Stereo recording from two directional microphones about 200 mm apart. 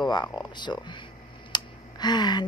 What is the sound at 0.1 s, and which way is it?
A woman's voice, 20° left (ahead or behind).